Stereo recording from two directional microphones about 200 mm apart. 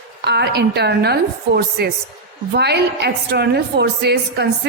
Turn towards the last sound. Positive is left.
turn(degrees=-55)  # may be behind; listen again after turning